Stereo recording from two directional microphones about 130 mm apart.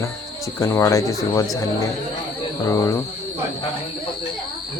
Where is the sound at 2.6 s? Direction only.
20° left (ahead or behind).